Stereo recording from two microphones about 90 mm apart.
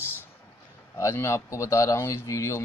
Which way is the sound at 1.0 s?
30° left (ahead or behind).